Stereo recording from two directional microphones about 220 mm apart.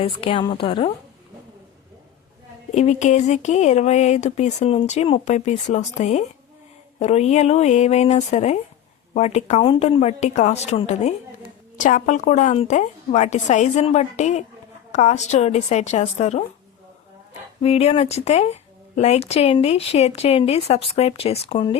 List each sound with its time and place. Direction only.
0.0 s speech: 25° left (ahead or behind)
2.7 s speech: 30° left (ahead or behind)
17.6 s speech: 30° left (ahead or behind)